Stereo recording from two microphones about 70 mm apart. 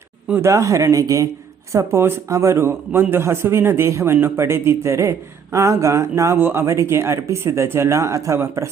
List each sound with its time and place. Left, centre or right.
0.4 s speech: right
1.7 s a man's voice: right